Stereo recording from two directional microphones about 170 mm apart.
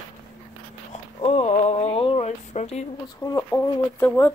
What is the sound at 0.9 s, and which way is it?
Speech, 35° left (ahead or behind).